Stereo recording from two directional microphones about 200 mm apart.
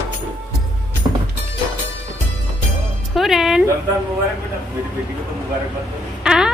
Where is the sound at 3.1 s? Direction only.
Centre (ahead or behind).